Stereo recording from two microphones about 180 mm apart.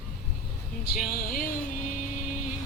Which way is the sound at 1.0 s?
55° left (ahead or behind).